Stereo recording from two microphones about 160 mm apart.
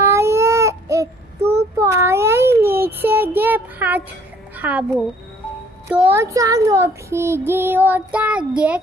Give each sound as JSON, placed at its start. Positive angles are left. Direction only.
{"t": 0.0, "sound": "baby cry", "side_deg": -15}
{"t": 1.8, "sound": "a sound", "side_deg": -20}
{"t": 4.5, "sound": "a child's voice", "side_deg": -10}
{"t": 5.9, "sound": "child singing", "side_deg": -10}